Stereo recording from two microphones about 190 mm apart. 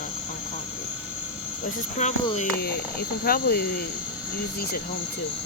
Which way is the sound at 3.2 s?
55° left (ahead or behind).